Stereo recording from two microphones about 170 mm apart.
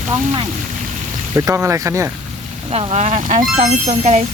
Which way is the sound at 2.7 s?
40° right (ahead or behind).